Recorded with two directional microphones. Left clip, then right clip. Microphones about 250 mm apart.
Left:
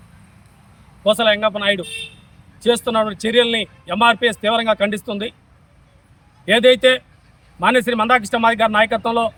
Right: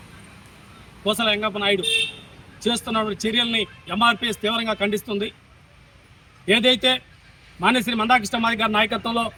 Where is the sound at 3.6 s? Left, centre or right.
Left.